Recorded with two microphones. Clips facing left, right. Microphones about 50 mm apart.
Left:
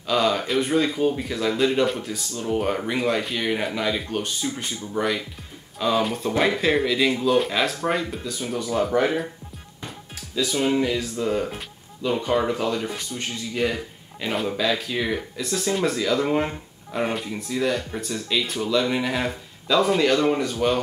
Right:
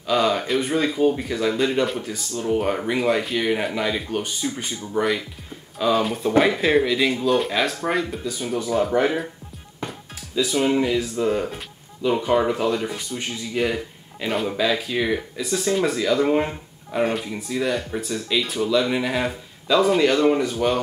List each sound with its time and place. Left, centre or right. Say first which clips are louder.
0.0 s speech: right 1 dB; centre
10.4 s speech: right 2 dB; centre